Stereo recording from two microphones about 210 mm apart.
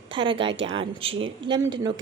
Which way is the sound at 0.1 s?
25° right (ahead or behind).